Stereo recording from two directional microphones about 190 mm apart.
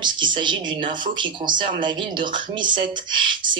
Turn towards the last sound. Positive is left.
turn(degrees=-25)  # may be behind; listen again after turning